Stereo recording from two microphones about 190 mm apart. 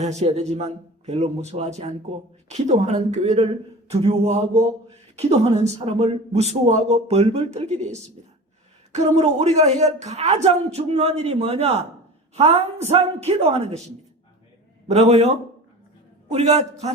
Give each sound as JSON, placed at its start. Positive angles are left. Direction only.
{"t": 0.0, "sound": "a man's voice", "side_deg": -35}
{"t": 14.8, "sound": "a man's voice", "side_deg": -35}
{"t": 16.3, "sound": "a man's voice", "side_deg": -35}